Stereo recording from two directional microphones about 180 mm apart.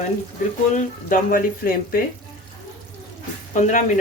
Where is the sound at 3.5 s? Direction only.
45° left (ahead or behind).